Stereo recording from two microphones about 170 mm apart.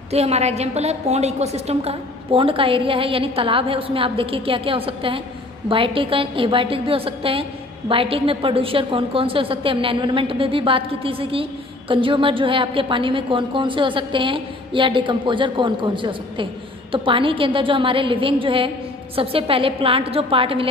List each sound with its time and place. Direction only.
0.1 s a woman's voice: 40° right (ahead or behind)